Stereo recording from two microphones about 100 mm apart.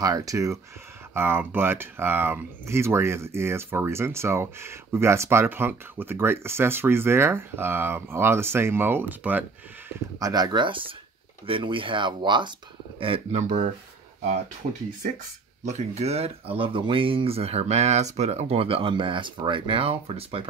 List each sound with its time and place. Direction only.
0.0 s speech: 35° right (ahead or behind)
1.1 s speech: 20° right (ahead or behind)
10.1 s speech: 40° right (ahead or behind)
13.3 s speech: 90° right
15.8 s speech: 90° right; by 20.4 s 75° right (ahead or behind)